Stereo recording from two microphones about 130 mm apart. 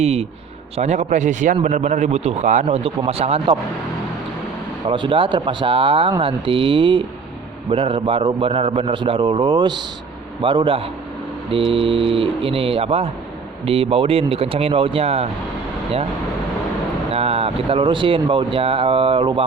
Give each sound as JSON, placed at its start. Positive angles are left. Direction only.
{"t": 0.0, "sound": "a man's voice", "side_deg": -55}
{"t": 4.9, "sound": "speech", "side_deg": -40}
{"t": 17.1, "sound": "speech", "side_deg": -50}